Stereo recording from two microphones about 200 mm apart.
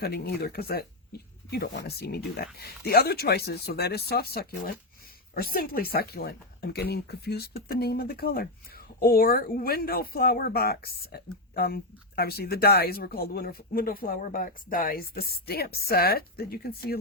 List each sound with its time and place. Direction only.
0.0 s speech: 50° left (ahead or behind)